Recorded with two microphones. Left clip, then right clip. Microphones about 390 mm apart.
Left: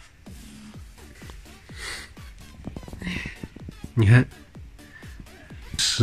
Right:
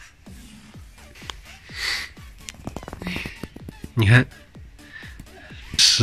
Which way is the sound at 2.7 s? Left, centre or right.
Right.